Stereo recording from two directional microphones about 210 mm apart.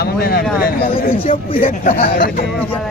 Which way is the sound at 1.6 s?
45° left (ahead or behind).